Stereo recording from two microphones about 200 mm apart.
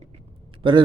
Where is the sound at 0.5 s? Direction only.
25° right (ahead or behind).